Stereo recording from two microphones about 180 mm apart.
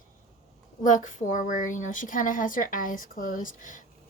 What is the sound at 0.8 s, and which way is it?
A woman's voice, 45° left (ahead or behind).